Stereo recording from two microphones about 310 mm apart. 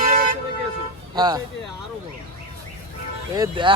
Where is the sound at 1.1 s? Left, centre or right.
Centre.